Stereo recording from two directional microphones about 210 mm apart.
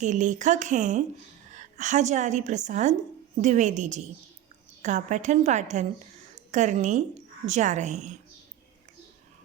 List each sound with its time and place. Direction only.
0.0 s a woman's voice: 35° right (ahead or behind)